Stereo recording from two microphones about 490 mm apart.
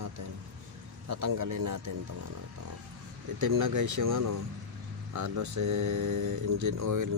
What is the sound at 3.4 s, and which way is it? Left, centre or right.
Speech, right.